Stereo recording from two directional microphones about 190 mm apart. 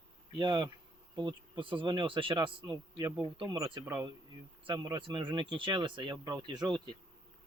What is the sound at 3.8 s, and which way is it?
Speech, 10° right (ahead or behind).